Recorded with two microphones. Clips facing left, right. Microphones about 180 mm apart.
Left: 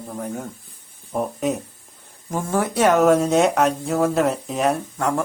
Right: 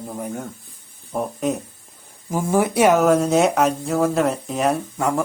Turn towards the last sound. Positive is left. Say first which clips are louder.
# right 1 dB
turn(degrees=-5)  # may be behind; listen again after turning